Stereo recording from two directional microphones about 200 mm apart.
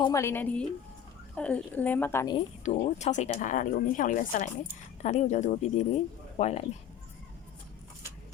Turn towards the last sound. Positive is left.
turn(degrees=35)  # may be behind; listen again after turning